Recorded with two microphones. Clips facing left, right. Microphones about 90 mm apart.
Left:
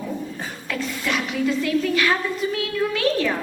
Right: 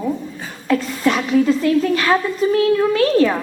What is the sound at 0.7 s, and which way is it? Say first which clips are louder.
A woman's voice: right 9 dB; 40° right (ahead or behind).